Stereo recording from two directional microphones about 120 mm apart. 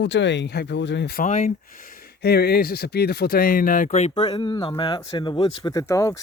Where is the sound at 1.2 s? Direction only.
80° left.